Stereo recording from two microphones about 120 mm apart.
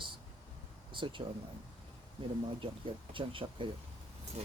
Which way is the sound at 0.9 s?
45° right (ahead or behind).